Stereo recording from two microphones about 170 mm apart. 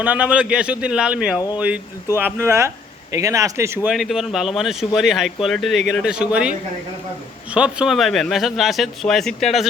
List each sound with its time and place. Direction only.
0.0 s speech: 10° right (ahead or behind)
3.8 s speech: centre (ahead or behind)
7.5 s speech: 5° right (ahead or behind)